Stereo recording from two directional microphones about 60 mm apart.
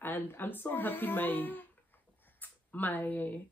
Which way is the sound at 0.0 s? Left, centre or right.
Left.